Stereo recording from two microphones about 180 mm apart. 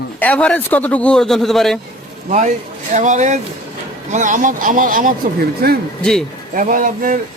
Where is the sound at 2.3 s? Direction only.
40° right (ahead or behind); by 5.8 s 60° right (ahead or behind).